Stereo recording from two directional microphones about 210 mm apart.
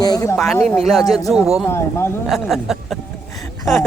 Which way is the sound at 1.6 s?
10° left (ahead or behind).